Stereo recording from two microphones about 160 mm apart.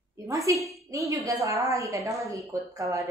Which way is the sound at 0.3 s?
20° right (ahead or behind).